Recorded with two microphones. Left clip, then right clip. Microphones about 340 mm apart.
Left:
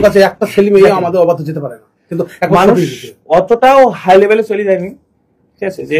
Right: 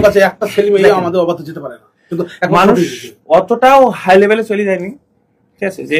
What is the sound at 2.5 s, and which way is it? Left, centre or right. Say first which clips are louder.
Speech: left 1 dB; centre.